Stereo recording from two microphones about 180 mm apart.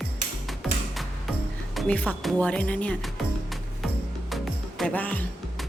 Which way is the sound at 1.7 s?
5° left (ahead or behind).